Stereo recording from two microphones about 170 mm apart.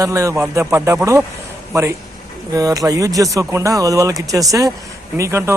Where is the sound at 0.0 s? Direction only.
20° right (ahead or behind).